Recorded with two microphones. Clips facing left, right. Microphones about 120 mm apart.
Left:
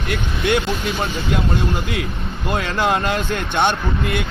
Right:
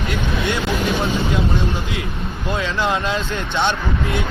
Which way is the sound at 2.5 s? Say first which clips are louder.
Left 2 dB; 55° left (ahead or behind).